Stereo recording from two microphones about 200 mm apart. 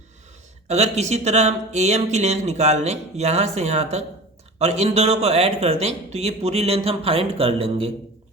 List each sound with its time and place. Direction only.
0.7 s speech: 35° right (ahead or behind)